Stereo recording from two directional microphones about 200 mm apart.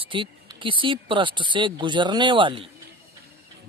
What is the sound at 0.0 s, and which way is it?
Speech, 25° right (ahead or behind).